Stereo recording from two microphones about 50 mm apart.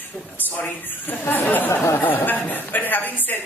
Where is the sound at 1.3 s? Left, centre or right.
Left.